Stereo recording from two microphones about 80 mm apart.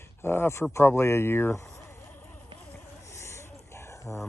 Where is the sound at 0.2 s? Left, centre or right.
Left.